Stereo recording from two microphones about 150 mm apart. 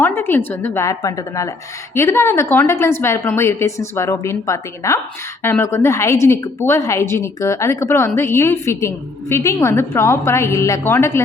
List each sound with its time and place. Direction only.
0.0 s a woman's voice: 15° left (ahead or behind)